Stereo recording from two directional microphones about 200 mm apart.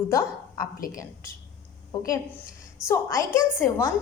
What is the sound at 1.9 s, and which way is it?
A woman's voice, 15° left (ahead or behind).